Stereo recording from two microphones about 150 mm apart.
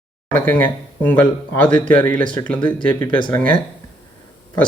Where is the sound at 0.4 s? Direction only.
10° left (ahead or behind).